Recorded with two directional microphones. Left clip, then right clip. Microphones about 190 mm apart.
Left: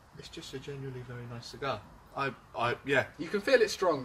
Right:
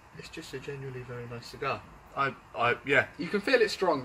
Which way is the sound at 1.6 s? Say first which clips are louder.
Right 2 dB; 15° left (ahead or behind).